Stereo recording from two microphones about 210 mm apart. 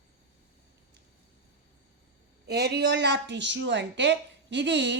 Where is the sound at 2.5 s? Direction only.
50° right (ahead or behind).